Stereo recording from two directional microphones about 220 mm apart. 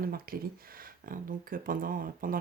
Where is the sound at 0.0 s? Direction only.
40° right (ahead or behind).